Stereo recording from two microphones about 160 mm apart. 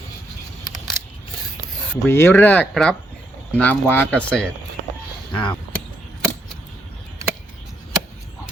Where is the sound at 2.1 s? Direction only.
15° left (ahead or behind).